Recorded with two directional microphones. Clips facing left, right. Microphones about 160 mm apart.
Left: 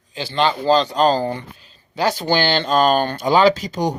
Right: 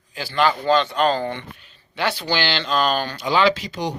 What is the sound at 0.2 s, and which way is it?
Speech, 25° left (ahead or behind).